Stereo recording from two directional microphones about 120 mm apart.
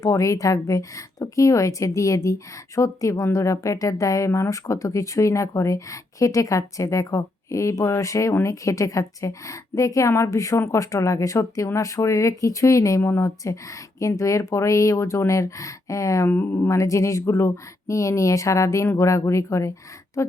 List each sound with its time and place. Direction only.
0.0 s a woman's voice: 25° left (ahead or behind)